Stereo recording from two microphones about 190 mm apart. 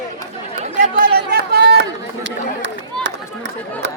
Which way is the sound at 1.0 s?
55° right (ahead or behind).